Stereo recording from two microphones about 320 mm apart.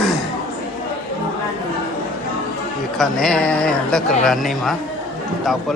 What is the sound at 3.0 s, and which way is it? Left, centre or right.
Speech, centre.